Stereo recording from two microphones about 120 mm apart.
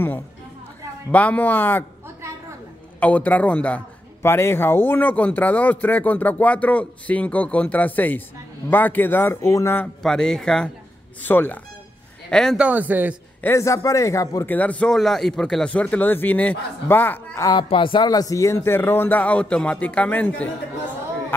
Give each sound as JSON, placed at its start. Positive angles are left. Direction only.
{"t": 1.1, "sound": "a man's voice", "side_deg": 10}
{"t": 3.0, "sound": "a man's voice", "side_deg": 10}
{"t": 10.0, "sound": "a man's voice", "side_deg": 5}
{"t": 12.5, "sound": "speech", "side_deg": -10}
{"t": 13.4, "sound": "a man's voice", "side_deg": 20}
{"t": 14.5, "sound": "a man's voice", "side_deg": 10}
{"t": 17.6, "sound": "a man's voice", "side_deg": 45}